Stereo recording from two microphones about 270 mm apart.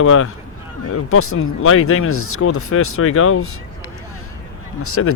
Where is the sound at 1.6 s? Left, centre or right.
Left.